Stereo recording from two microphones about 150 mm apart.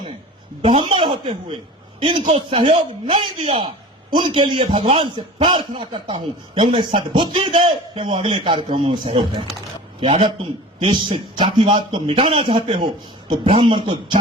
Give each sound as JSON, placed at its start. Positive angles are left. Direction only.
{"t": 0.6, "sound": "a man's voice", "side_deg": -40}